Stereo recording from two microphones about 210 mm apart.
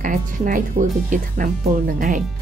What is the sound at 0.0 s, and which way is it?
A woman's voice, 40° right (ahead or behind).